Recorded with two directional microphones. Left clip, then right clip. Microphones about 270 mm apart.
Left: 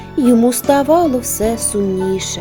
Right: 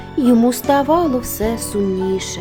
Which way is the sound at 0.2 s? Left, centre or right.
Centre.